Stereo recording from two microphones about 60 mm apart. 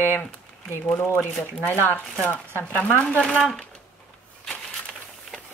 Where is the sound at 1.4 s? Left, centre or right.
Left.